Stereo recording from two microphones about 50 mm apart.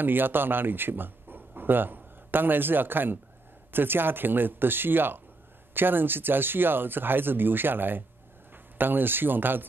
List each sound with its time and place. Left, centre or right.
0.0 s speech: right